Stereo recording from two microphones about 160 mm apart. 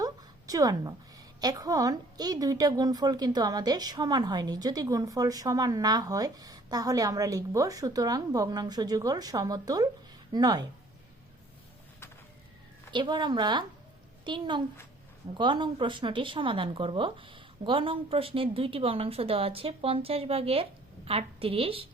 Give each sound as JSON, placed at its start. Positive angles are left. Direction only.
{"t": 0.0, "sound": "a sound", "side_deg": -25}
{"t": 1.4, "sound": "a woman's voice", "side_deg": -25}
{"t": 12.9, "sound": "a woman's voice", "side_deg": -30}